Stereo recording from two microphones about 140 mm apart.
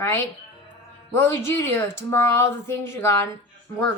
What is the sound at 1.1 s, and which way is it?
A woman's voice, 15° left (ahead or behind).